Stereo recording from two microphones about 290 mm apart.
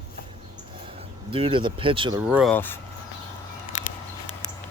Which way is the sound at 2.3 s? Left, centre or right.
Centre.